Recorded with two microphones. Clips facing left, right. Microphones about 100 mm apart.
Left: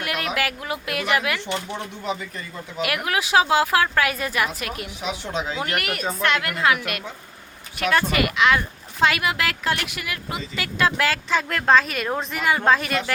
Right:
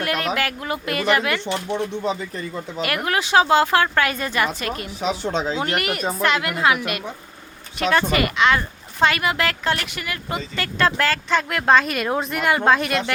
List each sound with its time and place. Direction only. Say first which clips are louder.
0.0 s speech: right 3 dB; 5° left (ahead or behind)
2.8 s speech: right 1 dB; 5° left (ahead or behind)
4.9 s speech: right 6 dB; 35° right (ahead or behind)
5.5 s speech: right 3 dB; centre (ahead or behind)